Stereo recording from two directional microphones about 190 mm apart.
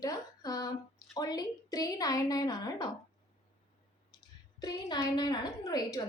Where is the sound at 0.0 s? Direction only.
20° left (ahead or behind).